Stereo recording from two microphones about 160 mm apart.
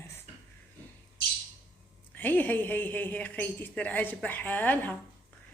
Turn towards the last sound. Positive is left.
turn(degrees=10)  # may be behind; listen again after turning